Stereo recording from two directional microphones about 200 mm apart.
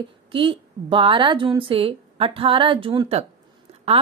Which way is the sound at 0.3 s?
25° right (ahead or behind).